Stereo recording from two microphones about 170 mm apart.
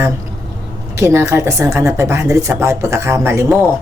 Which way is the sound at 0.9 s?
15° right (ahead or behind).